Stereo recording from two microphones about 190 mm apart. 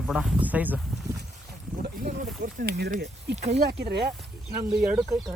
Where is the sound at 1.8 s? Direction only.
50° right (ahead or behind).